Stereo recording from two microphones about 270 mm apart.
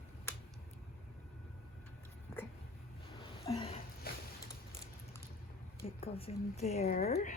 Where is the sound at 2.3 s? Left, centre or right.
Centre.